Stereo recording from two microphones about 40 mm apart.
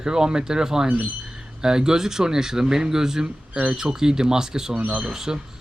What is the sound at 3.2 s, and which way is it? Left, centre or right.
Speech, right.